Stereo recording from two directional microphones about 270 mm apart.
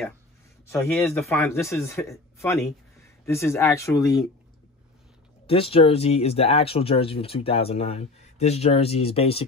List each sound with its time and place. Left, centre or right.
0.7 s speech: centre
5.5 s speech: left